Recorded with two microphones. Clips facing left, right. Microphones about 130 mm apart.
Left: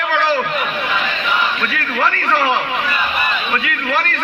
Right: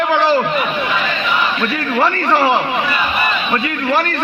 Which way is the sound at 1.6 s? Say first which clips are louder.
Right 3 dB; 25° right (ahead or behind).